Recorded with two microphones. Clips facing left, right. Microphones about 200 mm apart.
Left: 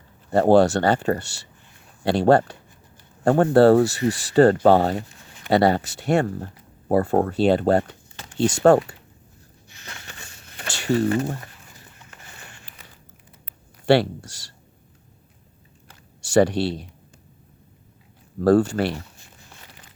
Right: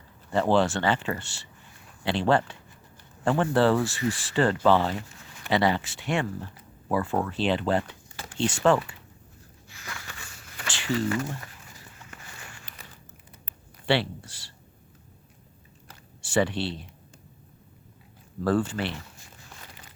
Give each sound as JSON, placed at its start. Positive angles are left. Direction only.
{"t": 0.3, "sound": "speech", "side_deg": 40}
{"t": 9.6, "sound": "a sound", "side_deg": 20}
{"t": 10.7, "sound": "a sound", "side_deg": 40}
{"t": 13.8, "sound": "speech", "side_deg": 45}
{"t": 16.2, "sound": "speech", "side_deg": 40}
{"t": 18.3, "sound": "speech", "side_deg": 40}